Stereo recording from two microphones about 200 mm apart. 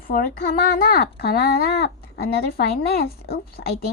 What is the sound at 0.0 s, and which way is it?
A child's voice, 45° left (ahead or behind).